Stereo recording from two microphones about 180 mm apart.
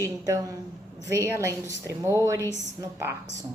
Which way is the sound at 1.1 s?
15° right (ahead or behind).